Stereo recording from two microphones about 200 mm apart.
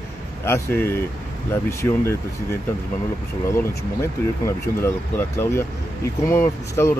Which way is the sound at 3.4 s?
15° left (ahead or behind).